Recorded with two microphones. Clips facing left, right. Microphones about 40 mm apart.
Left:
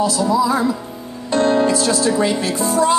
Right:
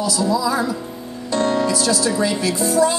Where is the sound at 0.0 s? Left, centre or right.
Left.